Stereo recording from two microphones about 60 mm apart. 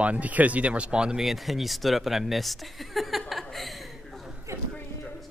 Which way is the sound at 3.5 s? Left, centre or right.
Centre.